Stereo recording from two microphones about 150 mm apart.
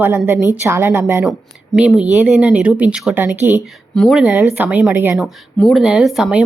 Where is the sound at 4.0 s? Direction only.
Centre (ahead or behind).